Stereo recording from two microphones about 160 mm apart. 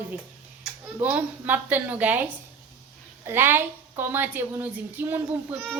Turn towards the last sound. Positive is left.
turn(degrees=-10)  # may be behind; listen again after turning